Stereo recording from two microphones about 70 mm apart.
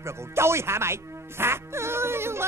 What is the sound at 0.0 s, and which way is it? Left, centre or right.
A woman's voice, right.